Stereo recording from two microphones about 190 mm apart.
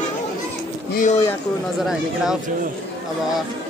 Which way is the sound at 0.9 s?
40° left (ahead or behind).